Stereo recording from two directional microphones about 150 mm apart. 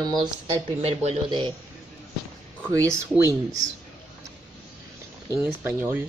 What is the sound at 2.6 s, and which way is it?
Speech, 20° right (ahead or behind).